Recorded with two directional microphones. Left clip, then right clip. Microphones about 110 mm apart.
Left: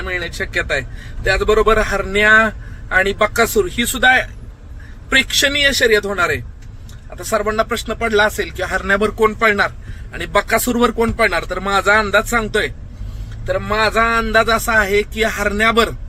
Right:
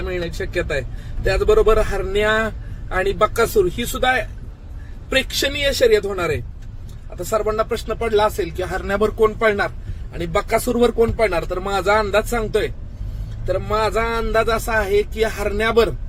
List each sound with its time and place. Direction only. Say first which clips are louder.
0.1 s a man's voice: left 5 dB; 15° right (ahead or behind)
9.1 s a man's voice: left 1 dB; 30° right (ahead or behind)